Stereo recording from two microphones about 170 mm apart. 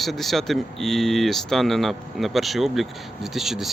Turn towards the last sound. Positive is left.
turn(degrees=0)  # may be behind; listen again after turning